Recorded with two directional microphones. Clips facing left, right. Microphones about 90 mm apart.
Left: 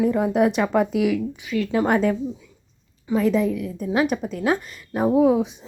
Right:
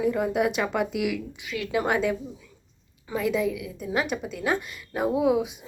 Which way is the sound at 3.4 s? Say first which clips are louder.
Left 4 dB; 40° left (ahead or behind).